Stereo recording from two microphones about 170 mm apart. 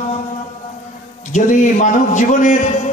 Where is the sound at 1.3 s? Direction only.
45° left (ahead or behind).